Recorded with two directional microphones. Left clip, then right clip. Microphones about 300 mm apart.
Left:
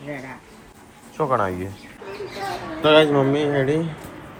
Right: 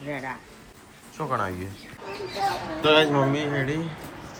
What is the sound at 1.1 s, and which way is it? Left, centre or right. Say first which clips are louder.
Speech: left 7 dB; centre.